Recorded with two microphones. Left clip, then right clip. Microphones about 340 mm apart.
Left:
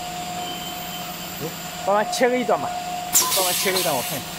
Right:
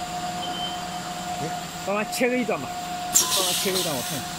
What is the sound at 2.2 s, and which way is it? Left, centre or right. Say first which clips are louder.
Speech: left 4 dB; left.